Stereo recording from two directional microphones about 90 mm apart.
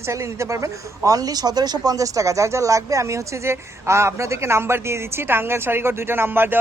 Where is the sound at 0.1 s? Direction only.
35° right (ahead or behind).